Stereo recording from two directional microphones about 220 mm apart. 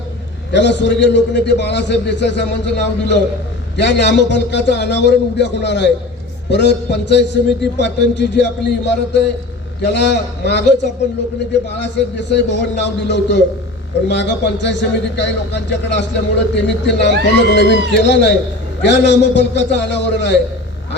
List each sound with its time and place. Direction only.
0.5 s a man's voice: 50° left (ahead or behind)
11.8 s a man's voice: 50° left (ahead or behind)